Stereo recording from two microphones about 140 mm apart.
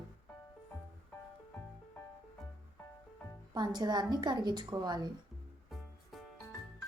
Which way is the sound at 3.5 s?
30° right (ahead or behind).